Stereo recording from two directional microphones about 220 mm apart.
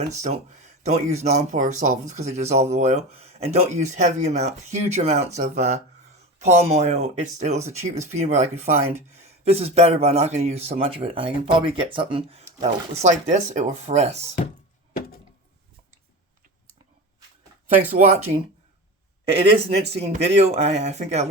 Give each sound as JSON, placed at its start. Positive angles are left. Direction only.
{"t": 0.2, "sound": "speech", "side_deg": -30}
{"t": 17.9, "sound": "speech", "side_deg": -30}